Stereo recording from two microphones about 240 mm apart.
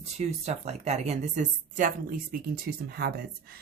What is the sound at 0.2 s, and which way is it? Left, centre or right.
A woman's voice, right.